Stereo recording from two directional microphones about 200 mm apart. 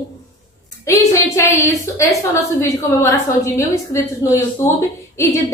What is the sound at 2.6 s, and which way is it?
A woman's voice, 15° left (ahead or behind).